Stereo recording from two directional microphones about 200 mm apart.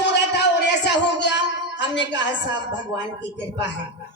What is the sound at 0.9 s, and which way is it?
Music, 60° left (ahead or behind).